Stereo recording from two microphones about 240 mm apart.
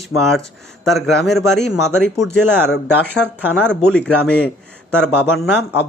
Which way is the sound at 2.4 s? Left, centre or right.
Centre.